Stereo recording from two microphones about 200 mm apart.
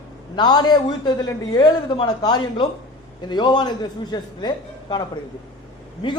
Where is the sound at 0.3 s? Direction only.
20° left (ahead or behind).